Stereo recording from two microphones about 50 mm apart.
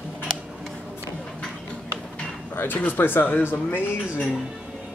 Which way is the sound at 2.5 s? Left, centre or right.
Left.